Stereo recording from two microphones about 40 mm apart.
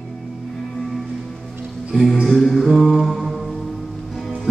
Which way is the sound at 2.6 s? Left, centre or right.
Centre.